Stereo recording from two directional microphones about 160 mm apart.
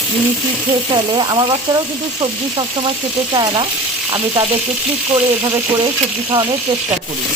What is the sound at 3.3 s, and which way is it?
Frying, 25° right (ahead or behind).